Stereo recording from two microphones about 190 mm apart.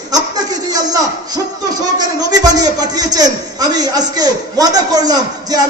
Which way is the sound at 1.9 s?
20° right (ahead or behind).